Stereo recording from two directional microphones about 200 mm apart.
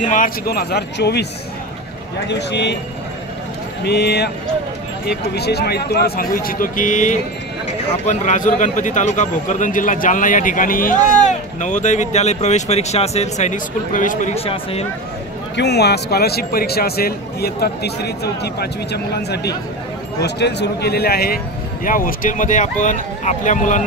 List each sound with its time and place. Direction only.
0.0 s speech: 40° left (ahead or behind)
2.2 s a man's voice: 60° left (ahead or behind)
3.8 s a man's voice: 55° left (ahead or behind); by 14.9 s 30° left (ahead or behind)
15.5 s a man's voice: 55° left (ahead or behind); by 23.8 s 40° left (ahead or behind)